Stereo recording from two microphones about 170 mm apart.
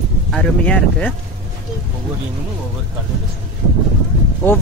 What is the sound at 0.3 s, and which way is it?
Speech, 5° left (ahead or behind).